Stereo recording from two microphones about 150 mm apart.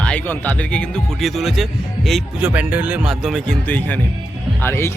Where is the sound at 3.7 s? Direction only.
10° left (ahead or behind).